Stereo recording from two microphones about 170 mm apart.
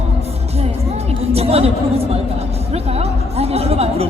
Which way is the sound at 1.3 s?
35° right (ahead or behind).